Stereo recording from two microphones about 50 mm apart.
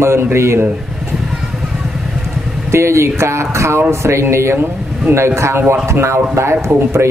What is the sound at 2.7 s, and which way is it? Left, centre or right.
Speech, right.